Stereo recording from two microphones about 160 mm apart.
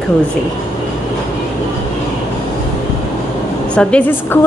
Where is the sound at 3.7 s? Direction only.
5° left (ahead or behind).